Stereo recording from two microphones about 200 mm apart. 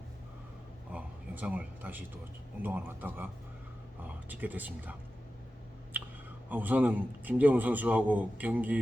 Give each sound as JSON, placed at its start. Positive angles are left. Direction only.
{"t": 0.9, "sound": "a sound", "side_deg": -5}
{"t": 2.6, "sound": "a man's voice", "side_deg": -10}
{"t": 4.3, "sound": "a man's voice", "side_deg": -10}
{"t": 6.5, "sound": "a man's voice", "side_deg": -10}